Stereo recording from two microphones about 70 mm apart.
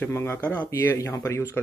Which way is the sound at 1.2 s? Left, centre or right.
Left.